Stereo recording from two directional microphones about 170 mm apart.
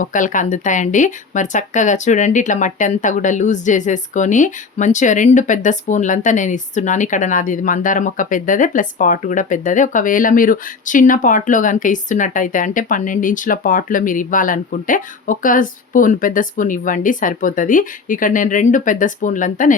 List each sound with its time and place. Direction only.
0.0 s speech: 50° left (ahead or behind)